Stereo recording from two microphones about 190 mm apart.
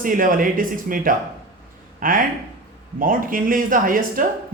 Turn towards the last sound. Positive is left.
turn(degrees=-45)  # may be behind; listen again after turning